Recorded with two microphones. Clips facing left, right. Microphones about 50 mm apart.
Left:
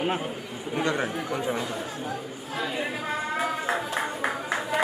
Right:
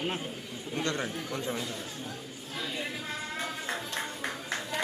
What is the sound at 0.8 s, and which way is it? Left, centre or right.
Speech, centre.